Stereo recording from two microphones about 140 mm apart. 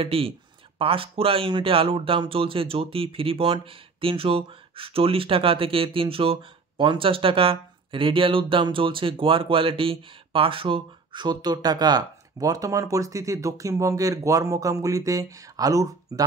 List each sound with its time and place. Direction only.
0.0 s speech: 40° right (ahead or behind); by 16.3 s 25° right (ahead or behind)